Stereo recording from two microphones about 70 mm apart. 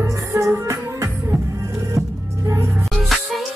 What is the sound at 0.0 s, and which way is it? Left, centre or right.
Music, right.